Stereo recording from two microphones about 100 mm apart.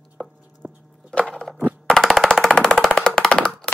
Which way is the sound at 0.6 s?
20° right (ahead or behind).